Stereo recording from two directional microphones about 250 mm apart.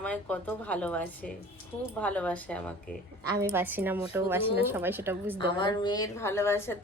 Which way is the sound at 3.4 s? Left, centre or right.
Centre.